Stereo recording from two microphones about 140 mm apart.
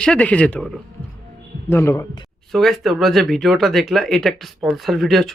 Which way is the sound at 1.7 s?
20° left (ahead or behind).